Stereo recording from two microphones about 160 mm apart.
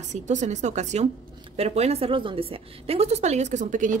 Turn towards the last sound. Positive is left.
turn(degrees=-50)  # may be behind; listen again after turning